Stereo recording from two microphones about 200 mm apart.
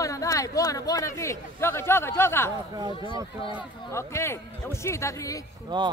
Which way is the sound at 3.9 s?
15° left (ahead or behind).